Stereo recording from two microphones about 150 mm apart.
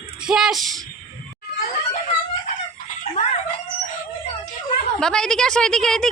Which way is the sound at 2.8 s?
55° left (ahead or behind).